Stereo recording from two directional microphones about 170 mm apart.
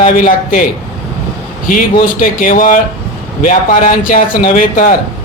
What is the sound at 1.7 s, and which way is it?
A man's voice, 55° left (ahead or behind).